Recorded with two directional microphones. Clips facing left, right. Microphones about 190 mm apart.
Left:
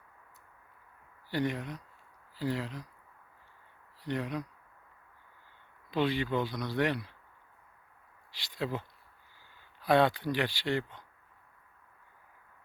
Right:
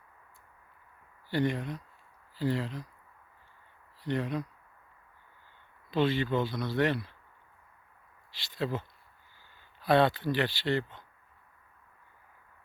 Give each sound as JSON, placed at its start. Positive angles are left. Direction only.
{"t": 1.3, "sound": "speech", "side_deg": 10}
{"t": 4.0, "sound": "speech", "side_deg": 10}
{"t": 5.9, "sound": "speech", "side_deg": 15}
{"t": 8.4, "sound": "speech", "side_deg": 15}
{"t": 9.8, "sound": "speech", "side_deg": 15}